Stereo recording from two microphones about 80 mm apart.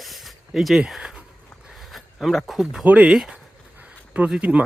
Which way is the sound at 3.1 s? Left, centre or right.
Centre.